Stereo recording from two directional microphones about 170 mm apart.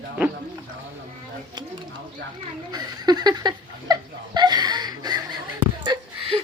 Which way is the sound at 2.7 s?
25° right (ahead or behind).